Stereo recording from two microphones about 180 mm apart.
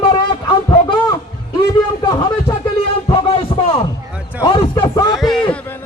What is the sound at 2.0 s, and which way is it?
Speech, 20° left (ahead or behind).